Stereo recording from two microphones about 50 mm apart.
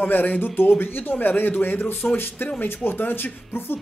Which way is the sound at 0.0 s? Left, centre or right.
Left.